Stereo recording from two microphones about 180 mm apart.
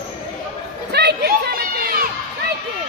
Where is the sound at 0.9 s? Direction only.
65° right (ahead or behind).